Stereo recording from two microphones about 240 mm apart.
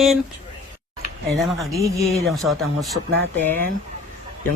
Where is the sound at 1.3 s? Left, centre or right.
Centre.